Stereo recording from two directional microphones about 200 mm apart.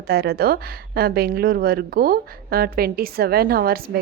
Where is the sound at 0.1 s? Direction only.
50° right (ahead or behind).